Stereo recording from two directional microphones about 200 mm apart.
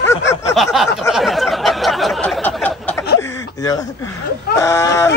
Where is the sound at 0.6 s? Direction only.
Centre (ahead or behind); by 3.8 s 15° left (ahead or behind).